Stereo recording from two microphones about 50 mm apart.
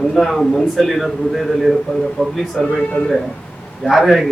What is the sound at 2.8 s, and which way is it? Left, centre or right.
Speech, left.